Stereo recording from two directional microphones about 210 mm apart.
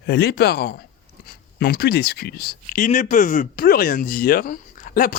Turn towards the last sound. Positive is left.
turn(degrees=40)  # may be behind; listen again after turning